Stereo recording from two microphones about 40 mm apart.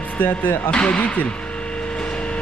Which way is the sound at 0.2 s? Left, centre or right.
Left.